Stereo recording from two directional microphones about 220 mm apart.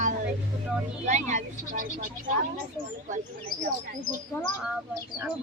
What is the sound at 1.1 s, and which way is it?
Speech, 35° right (ahead or behind).